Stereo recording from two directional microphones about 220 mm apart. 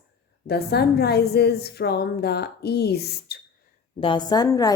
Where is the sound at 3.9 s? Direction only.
20° left (ahead or behind).